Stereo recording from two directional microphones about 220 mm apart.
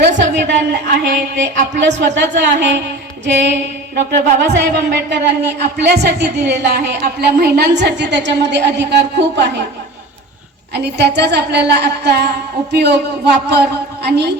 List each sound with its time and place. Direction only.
0.1 s a sound: 35° right (ahead or behind)
0.4 s a woman's voice: 50° right (ahead or behind)
2.0 s speech: 50° right (ahead or behind)
3.9 s speech: 50° right (ahead or behind)
10.8 s speech: 50° right (ahead or behind)